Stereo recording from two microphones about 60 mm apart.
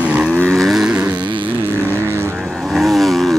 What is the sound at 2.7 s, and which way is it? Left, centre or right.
Vehicle, centre.